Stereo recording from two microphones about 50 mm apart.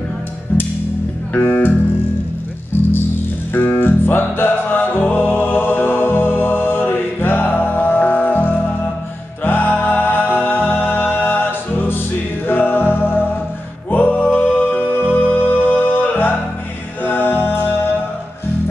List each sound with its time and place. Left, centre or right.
1.3 s speech: left
3.5 s music: left